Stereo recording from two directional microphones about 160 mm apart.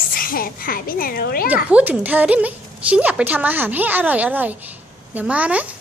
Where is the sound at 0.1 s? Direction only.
65° left (ahead or behind).